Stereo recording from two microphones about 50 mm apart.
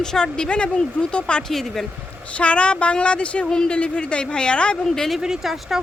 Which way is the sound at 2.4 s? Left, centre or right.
Left.